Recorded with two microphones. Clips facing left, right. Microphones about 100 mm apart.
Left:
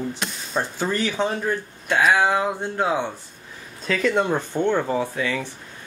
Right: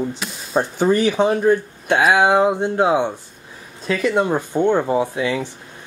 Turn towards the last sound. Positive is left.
turn(degrees=-20)  # may be behind; listen again after turning